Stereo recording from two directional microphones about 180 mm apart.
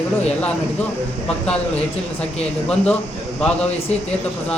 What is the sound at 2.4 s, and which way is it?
Speech, 5° left (ahead or behind).